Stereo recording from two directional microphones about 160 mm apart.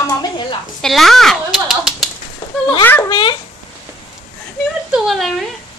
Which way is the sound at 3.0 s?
30° left (ahead or behind).